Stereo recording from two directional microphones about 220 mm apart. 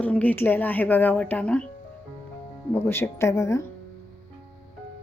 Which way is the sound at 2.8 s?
10° left (ahead or behind).